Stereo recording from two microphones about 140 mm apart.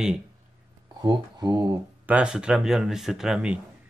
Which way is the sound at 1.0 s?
30° right (ahead or behind).